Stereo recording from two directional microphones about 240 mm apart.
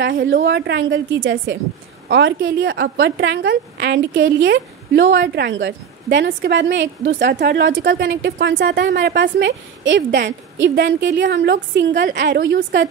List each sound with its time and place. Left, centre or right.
0.2 s a woman's voice: right